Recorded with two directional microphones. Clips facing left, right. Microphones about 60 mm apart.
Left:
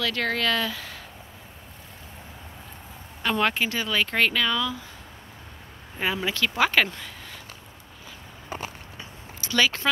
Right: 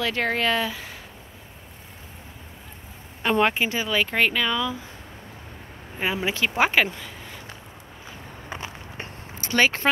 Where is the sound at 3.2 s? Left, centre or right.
Right.